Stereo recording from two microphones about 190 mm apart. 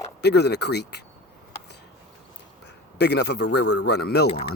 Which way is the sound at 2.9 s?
60° left (ahead or behind).